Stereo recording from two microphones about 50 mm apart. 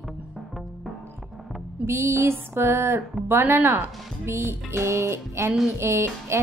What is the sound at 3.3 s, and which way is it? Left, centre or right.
Speech, right.